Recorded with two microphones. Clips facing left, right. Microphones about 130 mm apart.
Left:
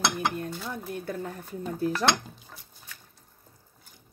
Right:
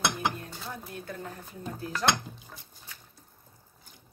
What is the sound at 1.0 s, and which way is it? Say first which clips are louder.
Speech: left 5 dB; 50° left (ahead or behind).